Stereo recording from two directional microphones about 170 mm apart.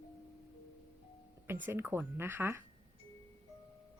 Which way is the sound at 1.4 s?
10° right (ahead or behind).